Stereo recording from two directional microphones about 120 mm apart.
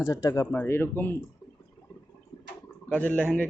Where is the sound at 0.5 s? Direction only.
20° left (ahead or behind).